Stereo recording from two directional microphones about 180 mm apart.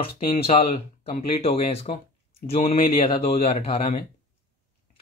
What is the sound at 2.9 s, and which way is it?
Speech, 30° left (ahead or behind).